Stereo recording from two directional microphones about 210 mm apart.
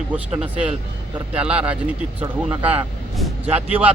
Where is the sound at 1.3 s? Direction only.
5° right (ahead or behind).